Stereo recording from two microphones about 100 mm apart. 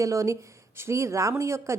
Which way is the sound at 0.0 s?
30° right (ahead or behind).